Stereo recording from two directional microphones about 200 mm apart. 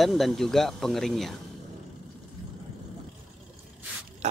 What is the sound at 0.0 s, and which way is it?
Speech, centre (ahead or behind).